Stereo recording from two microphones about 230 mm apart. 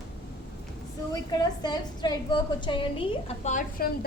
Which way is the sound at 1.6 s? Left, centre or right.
Centre.